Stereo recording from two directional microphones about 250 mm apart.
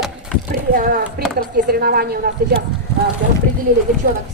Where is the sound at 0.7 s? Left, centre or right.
Right.